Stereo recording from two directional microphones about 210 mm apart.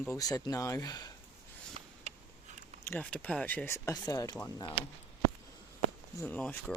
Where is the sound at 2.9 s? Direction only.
5° left (ahead or behind).